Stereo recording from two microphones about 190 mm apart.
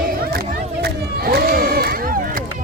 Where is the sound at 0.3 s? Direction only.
55° right (ahead or behind).